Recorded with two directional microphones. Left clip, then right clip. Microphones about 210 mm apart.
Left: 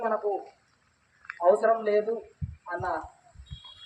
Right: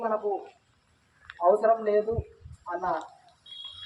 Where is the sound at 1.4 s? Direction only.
45° left (ahead or behind).